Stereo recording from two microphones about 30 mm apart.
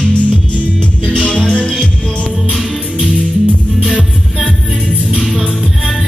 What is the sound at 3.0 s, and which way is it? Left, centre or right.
Music, right.